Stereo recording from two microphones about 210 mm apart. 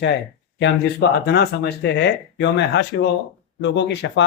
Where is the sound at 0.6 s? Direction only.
55° left (ahead or behind).